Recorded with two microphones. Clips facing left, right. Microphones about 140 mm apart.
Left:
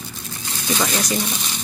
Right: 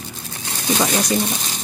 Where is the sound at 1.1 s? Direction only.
25° right (ahead or behind).